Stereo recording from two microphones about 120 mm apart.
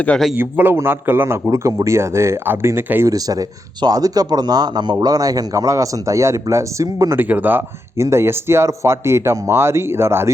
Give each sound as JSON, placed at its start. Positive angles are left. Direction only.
{"t": 0.3, "sound": "a man's voice", "side_deg": -15}
{"t": 7.2, "sound": "a man's voice", "side_deg": -15}